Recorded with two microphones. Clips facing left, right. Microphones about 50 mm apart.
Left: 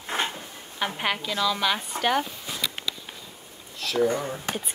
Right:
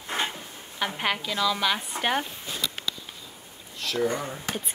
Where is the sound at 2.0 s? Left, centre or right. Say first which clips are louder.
Left 4 dB; centre.